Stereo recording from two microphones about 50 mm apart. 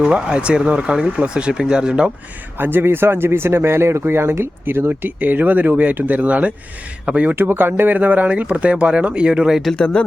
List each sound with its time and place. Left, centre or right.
0.0 s speech: centre
2.6 s speech: right
4.0 s speech: right
7.3 s speech: right
7.9 s speech: right; by 9.6 s centre
9.7 s speech: centre